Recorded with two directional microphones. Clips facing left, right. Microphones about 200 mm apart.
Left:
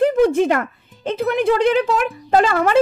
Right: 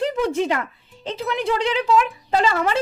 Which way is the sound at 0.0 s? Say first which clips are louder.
Left 7 dB; 50° left (ahead or behind).